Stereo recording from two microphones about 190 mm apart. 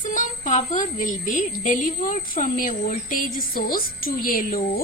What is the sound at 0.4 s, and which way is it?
A woman's voice, 40° left (ahead or behind).